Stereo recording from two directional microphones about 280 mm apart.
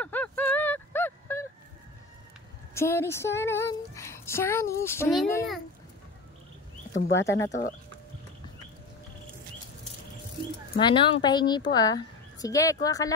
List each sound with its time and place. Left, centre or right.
0.0 s a sound: centre
2.7 s female singing: centre
6.9 s speech: left
7.2 s female singing: centre
10.8 s female singing: centre